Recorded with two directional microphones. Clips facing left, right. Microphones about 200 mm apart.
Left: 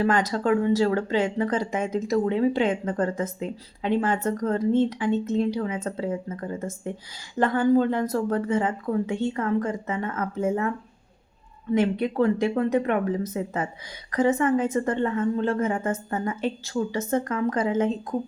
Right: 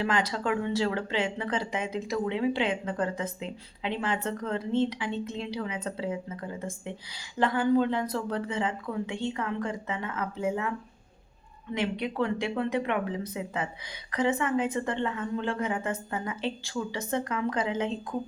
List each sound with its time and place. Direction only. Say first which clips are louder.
0.0 s speech: left 6 dB; 45° left (ahead or behind)
11.7 s speech: left 8 dB; 45° left (ahead or behind)